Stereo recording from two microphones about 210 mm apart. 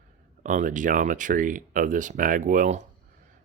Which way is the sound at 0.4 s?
35° right (ahead or behind).